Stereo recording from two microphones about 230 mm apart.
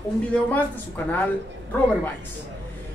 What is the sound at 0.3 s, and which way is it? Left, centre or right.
Speech, centre.